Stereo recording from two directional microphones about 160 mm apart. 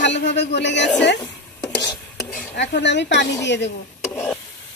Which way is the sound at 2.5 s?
90° left.